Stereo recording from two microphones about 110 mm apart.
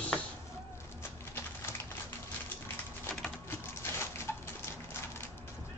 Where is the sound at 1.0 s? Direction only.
20° left (ahead or behind).